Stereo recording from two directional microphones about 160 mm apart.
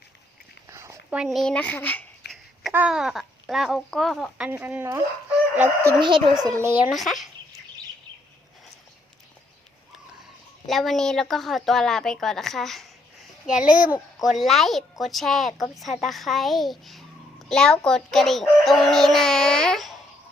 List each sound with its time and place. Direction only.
0.7 s a sound: 20° right (ahead or behind)
1.1 s speech: 5° right (ahead or behind)
2.7 s a woman's voice: 5° right (ahead or behind)
4.4 s speech: 10° right (ahead or behind)
6.0 s speech: 30° right (ahead or behind)
6.4 s speech: 15° right (ahead or behind)
6.9 s a woman's voice: centre (ahead or behind)
10.7 s a woman's voice: centre (ahead or behind)